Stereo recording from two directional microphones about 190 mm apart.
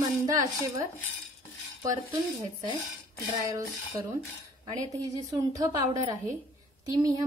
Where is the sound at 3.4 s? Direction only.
15° right (ahead or behind).